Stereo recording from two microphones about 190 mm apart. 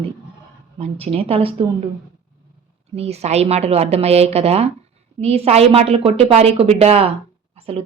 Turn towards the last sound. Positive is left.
turn(degrees=-30)  # may be behind; listen again after turning